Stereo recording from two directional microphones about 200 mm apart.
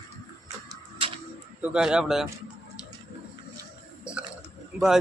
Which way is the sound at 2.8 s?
5° right (ahead or behind).